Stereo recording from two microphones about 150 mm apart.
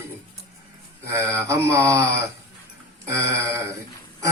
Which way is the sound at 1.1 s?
20° right (ahead or behind).